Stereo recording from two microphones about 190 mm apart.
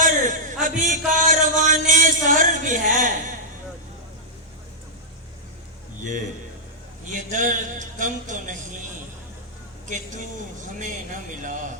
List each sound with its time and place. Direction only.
0.0 s chant: 40° right (ahead or behind)
7.1 s speech: 40° right (ahead or behind)
10.8 s speech: 40° right (ahead or behind)